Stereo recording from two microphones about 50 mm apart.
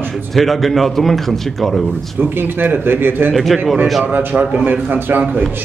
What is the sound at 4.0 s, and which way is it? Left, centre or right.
A man's voice, right.